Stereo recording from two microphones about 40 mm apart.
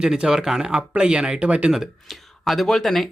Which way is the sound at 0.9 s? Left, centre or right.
Right.